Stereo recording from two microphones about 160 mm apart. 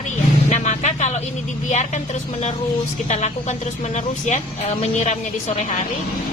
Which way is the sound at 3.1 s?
45° left (ahead or behind).